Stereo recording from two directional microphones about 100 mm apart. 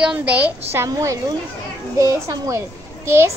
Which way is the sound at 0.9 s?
40° right (ahead or behind).